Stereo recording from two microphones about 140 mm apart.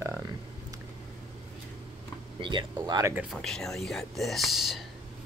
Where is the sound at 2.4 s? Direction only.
35° right (ahead or behind).